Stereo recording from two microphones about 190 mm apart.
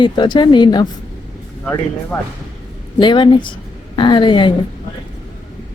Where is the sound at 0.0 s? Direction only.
25° left (ahead or behind).